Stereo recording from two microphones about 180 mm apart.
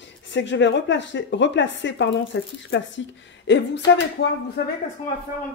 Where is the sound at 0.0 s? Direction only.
85° left; by 4.7 s 65° left (ahead or behind).